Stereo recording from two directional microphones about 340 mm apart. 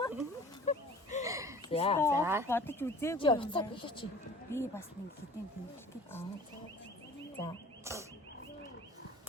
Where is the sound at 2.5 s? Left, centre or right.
Centre.